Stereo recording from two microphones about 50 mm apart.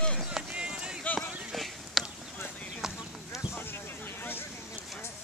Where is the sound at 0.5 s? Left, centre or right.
Centre.